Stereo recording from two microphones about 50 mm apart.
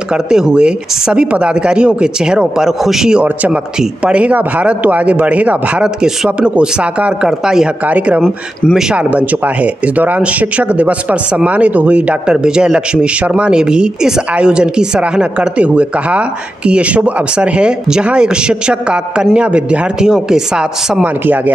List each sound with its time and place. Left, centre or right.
0.1 s speech: centre
4.0 s speech: right
5.8 s speech: centre
7.2 s speech: centre
8.9 s speech: right
12.4 s speech: centre
21.0 s speech: right